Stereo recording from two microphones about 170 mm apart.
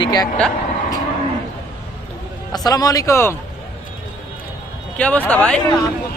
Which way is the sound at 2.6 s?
20° left (ahead or behind).